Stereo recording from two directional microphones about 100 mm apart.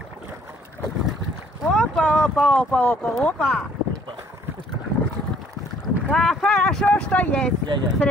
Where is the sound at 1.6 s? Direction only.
5° left (ahead or behind).